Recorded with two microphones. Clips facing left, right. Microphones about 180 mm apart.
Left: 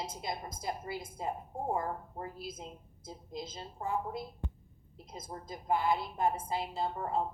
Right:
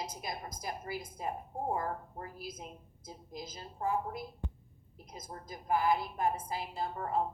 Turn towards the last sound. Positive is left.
turn(degrees=25)  # may be behind; listen again after turning